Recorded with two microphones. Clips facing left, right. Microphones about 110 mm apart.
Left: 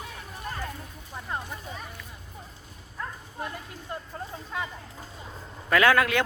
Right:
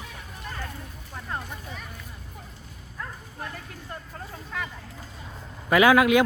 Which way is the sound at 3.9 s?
20° left (ahead or behind).